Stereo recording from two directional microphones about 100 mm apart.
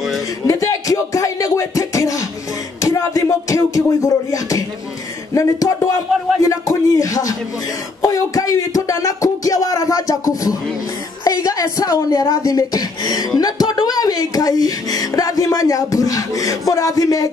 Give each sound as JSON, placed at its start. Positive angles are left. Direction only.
{"t": 0.5, "sound": "music", "side_deg": 35}
{"t": 5.3, "sound": "speech", "side_deg": 35}
{"t": 6.4, "sound": "a sound", "side_deg": 35}
{"t": 8.0, "sound": "speech", "side_deg": 35}